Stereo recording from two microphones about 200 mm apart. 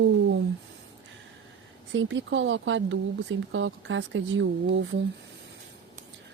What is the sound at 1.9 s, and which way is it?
A woman's voice, 70° right (ahead or behind).